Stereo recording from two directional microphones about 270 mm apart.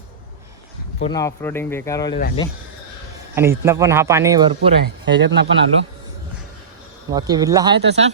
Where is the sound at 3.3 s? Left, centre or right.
Centre.